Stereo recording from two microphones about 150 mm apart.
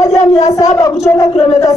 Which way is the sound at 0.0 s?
20° left (ahead or behind).